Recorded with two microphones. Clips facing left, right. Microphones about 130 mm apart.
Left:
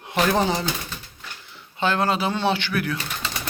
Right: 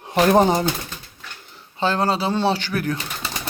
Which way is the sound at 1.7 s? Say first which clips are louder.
Right 1 dB; 35° right (ahead or behind).